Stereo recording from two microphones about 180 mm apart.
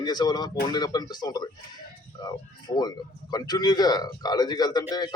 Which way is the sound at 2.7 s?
20° left (ahead or behind).